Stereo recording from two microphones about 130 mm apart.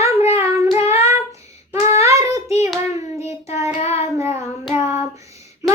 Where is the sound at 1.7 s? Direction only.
20° right (ahead or behind).